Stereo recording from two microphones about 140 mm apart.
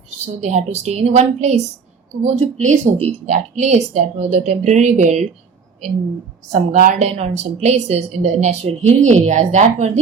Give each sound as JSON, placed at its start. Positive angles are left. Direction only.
{"t": 0.4, "sound": "a woman's voice", "side_deg": -55}
{"t": 6.5, "sound": "a woman's voice", "side_deg": -60}